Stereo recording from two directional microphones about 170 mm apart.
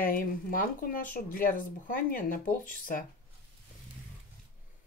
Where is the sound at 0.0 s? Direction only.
55° left (ahead or behind).